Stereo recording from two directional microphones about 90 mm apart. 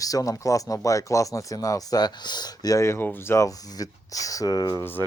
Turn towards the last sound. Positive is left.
turn(degrees=45)  # may be behind; listen again after turning